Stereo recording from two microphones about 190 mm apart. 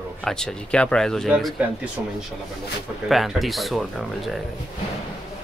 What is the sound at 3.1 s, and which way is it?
Speech, centre (ahead or behind).